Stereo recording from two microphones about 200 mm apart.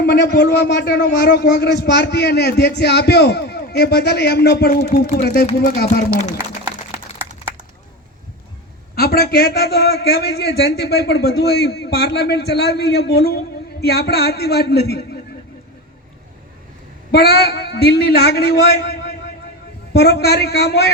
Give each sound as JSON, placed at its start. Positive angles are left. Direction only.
{"t": 0.0, "sound": "a man's voice", "side_deg": 55}
{"t": 6.7, "sound": "a sound", "side_deg": -15}
{"t": 9.0, "sound": "a man's voice", "side_deg": 55}
{"t": 17.1, "sound": "a man's voice", "side_deg": 50}